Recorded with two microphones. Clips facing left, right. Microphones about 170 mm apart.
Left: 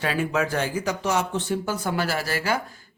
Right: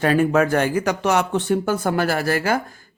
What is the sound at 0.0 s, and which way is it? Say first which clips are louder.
Speech: right 8 dB; 50° right (ahead or behind).